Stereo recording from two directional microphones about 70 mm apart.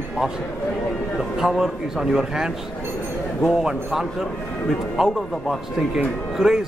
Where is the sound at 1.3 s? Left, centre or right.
Centre.